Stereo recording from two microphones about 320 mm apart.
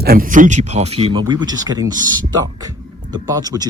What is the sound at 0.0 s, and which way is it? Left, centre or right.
Speech, right.